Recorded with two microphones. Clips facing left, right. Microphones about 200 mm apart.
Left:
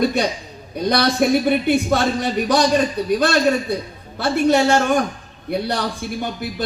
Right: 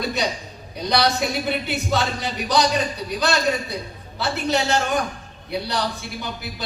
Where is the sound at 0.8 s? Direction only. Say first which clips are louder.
Left 4 dB; 50° left (ahead or behind).